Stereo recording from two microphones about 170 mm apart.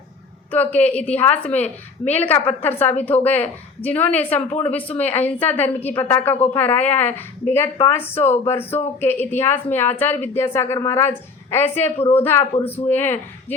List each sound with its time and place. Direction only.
0.5 s a woman's voice: 10° left (ahead or behind)
11.9 s a woman's voice: 35° left (ahead or behind)
12.2 s a woman's voice: 10° left (ahead or behind)